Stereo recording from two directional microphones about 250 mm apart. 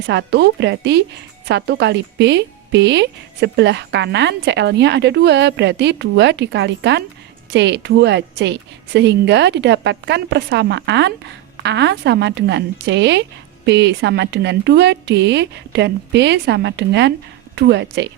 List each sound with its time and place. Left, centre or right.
0.1 s a woman's voice: right